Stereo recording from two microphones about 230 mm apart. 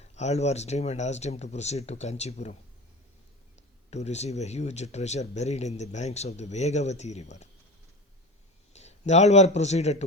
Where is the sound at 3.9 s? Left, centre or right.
Left.